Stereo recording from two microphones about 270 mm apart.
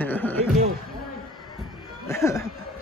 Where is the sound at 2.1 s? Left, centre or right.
Centre.